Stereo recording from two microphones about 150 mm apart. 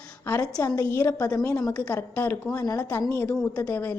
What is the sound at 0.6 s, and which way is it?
Speech, 25° left (ahead or behind).